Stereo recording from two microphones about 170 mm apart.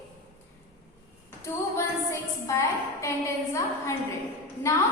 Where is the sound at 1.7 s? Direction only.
15° left (ahead or behind).